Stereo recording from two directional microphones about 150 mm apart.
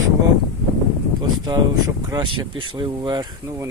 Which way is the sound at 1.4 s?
25° right (ahead or behind).